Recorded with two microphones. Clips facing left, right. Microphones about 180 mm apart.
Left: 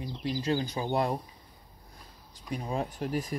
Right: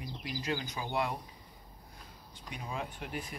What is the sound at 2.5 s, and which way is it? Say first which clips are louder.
Speech: left 7 dB; 40° left (ahead or behind).